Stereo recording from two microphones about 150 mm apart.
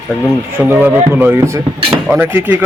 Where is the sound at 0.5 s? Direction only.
10° right (ahead or behind).